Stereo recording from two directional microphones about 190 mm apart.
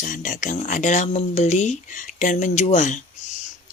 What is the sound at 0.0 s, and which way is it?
Speech, 45° left (ahead or behind).